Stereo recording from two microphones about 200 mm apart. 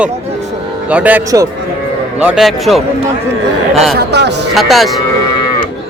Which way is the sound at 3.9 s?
60° right (ahead or behind).